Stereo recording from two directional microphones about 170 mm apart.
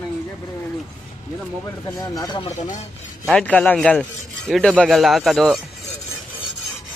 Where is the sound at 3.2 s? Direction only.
5° left (ahead or behind).